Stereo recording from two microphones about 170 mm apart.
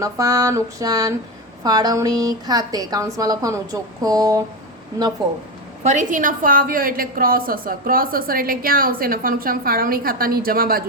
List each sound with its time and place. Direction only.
0.0 s a woman's voice: 20° right (ahead or behind)
5.8 s a woman's voice: 45° right (ahead or behind)